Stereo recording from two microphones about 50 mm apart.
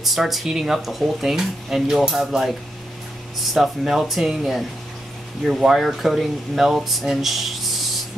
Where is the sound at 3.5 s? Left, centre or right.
Centre.